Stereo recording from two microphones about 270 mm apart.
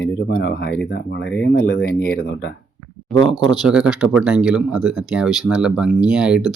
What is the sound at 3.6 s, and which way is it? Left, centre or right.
Speech, centre.